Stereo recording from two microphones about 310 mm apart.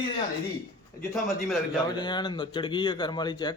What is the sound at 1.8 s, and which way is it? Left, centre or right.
A man's voice, centre.